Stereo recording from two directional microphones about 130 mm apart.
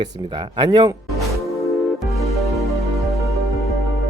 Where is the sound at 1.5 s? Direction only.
Centre (ahead or behind).